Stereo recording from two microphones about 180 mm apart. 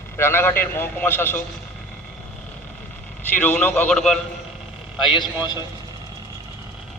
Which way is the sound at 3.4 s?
10° left (ahead or behind).